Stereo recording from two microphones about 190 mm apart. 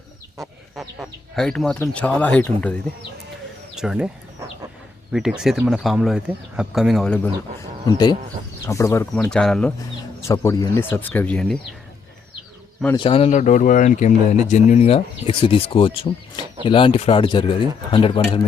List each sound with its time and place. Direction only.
0.8 s speech: centre (ahead or behind)
3.8 s speech: 5° right (ahead or behind)
5.1 s speech: 5° right (ahead or behind)
7.9 s speech: 20° left (ahead or behind)
9.1 s speech: 5° left (ahead or behind)
10.2 s speech: 15° left (ahead or behind)
13.0 s speech: 30° left (ahead or behind)